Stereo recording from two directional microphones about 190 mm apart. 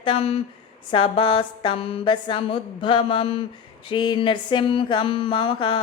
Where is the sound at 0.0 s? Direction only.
30° left (ahead or behind).